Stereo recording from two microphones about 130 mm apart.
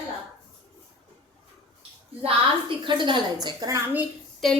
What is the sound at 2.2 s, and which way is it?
A woman's voice, 40° right (ahead or behind).